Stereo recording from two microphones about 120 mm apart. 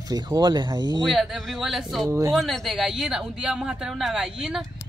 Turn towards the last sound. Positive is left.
turn(degrees=-5)  # may be behind; listen again after turning